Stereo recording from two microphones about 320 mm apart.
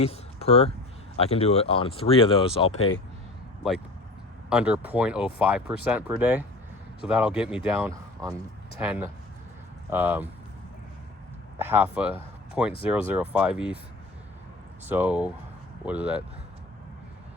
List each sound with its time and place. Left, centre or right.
0.0 s speech: centre
2.6 s speech: left
4.4 s speech: centre
11.6 s speech: centre
14.8 s speech: centre